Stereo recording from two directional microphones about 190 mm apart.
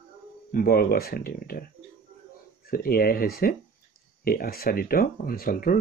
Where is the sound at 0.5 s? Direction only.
50° left (ahead or behind).